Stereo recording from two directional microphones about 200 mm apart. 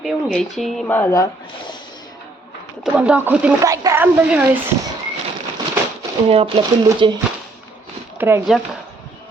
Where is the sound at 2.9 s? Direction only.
5° right (ahead or behind).